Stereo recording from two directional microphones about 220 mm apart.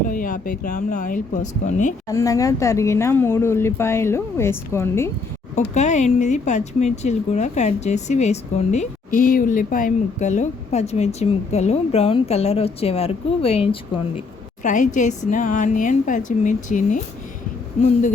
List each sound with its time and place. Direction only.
0.0 s a woman's voice: 40° left (ahead or behind)
2.0 s speech: 15° left (ahead or behind)
5.5 s a woman's voice: 30° left (ahead or behind)